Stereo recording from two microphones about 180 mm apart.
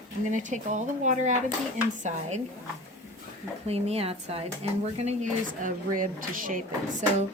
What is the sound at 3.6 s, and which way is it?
Speech, 35° right (ahead or behind).